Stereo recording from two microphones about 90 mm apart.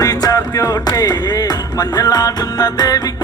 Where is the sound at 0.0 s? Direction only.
45° left (ahead or behind).